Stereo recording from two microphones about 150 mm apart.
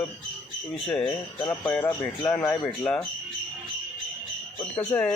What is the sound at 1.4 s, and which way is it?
Speech, 15° left (ahead or behind).